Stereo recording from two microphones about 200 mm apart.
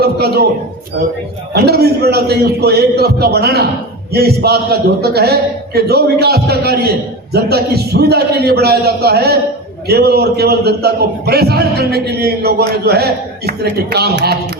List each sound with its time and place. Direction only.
0.0 s a man's voice: 50° right (ahead or behind)
1.5 s a man's voice: 55° right (ahead or behind)